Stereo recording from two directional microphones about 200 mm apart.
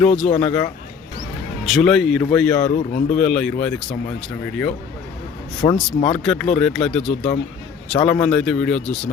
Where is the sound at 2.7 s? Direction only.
40° left (ahead or behind).